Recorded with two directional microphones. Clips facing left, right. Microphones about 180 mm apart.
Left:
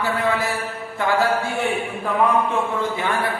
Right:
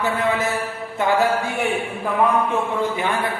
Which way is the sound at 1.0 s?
20° right (ahead or behind).